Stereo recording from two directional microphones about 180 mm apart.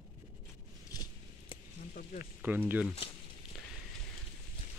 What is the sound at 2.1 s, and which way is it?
Speech, 45° left (ahead or behind).